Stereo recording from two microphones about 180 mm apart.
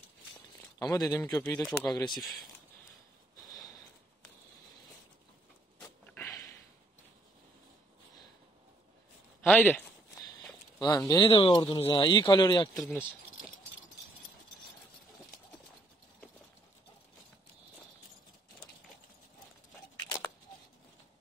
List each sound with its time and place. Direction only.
0.7 s speech: 20° left (ahead or behind)
3.5 s a sound: 20° left (ahead or behind)
5.8 s a sound: 10° left (ahead or behind)
9.4 s a man's voice: 10° left (ahead or behind)
10.8 s speech: 20° left (ahead or behind)
11.2 s speech: 30° left (ahead or behind)